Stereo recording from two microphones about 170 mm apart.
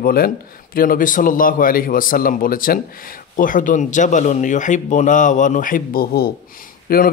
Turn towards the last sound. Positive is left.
turn(degrees=60)  # may be behind; listen again after turning